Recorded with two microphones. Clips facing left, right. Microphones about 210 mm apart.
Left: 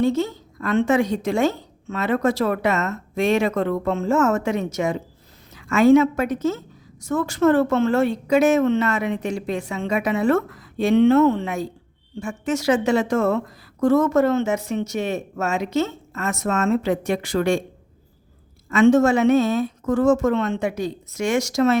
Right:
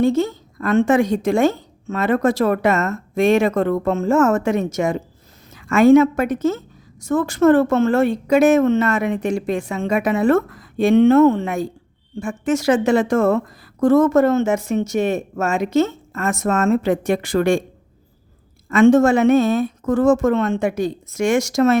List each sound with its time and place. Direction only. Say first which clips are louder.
0.0 s a woman's voice: right 3 dB; 50° right (ahead or behind)
18.7 s a woman's voice: right 3 dB; 50° right (ahead or behind)